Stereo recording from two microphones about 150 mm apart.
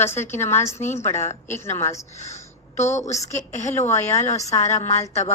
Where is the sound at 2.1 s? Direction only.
50° left (ahead or behind).